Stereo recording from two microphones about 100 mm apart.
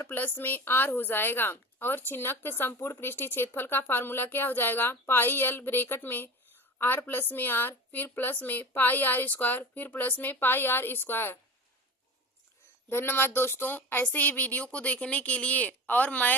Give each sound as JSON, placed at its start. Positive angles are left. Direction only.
{"t": 0.0, "sound": "a woman's voice", "side_deg": 20}
{"t": 12.9, "sound": "speech", "side_deg": 20}